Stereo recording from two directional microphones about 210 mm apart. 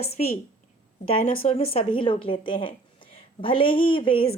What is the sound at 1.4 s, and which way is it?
A woman's voice, 30° left (ahead or behind).